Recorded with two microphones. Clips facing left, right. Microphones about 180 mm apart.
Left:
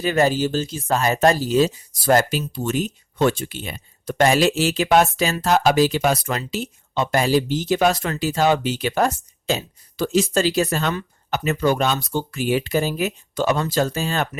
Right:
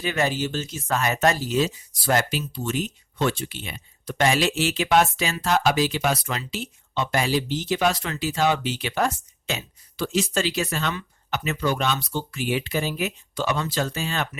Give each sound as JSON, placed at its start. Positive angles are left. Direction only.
{"t": 0.0, "sound": "speech", "side_deg": 40}